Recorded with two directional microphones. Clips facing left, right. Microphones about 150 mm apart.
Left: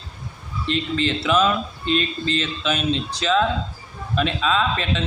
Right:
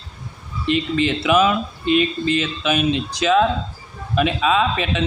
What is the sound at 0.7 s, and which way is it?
A man's voice, 10° right (ahead or behind).